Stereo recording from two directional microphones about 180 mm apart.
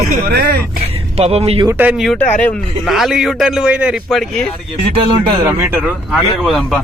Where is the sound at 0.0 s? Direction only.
60° right (ahead or behind).